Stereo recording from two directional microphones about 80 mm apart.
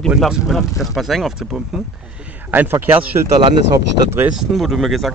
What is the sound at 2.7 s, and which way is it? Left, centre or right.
Speech, right.